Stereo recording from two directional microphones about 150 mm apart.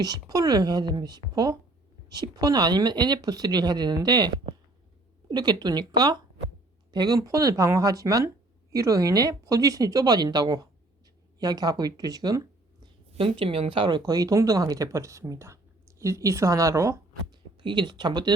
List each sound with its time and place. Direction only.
0.0 s speech: 25° right (ahead or behind)
5.3 s speech: 25° right (ahead or behind)
17.6 s speech: 30° right (ahead or behind)